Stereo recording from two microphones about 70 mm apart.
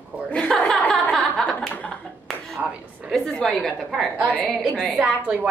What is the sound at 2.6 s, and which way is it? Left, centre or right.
Speech, right.